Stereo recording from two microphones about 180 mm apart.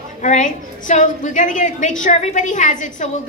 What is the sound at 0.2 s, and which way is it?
A woman's voice, 45° left (ahead or behind).